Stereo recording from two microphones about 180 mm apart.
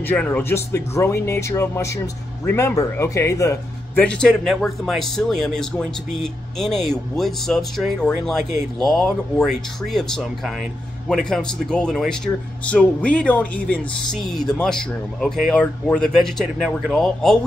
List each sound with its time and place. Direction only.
0.1 s speech: 10° left (ahead or behind)
4.0 s speech: 5° left (ahead or behind)